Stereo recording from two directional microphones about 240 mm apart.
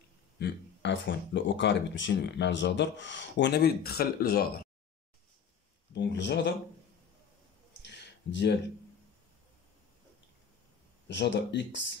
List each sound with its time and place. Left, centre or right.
0.4 s speech: left
5.9 s speech: left
7.8 s a sound: left
11.1 s speech: left